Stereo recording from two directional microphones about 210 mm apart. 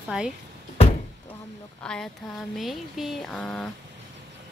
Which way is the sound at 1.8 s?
5° left (ahead or behind).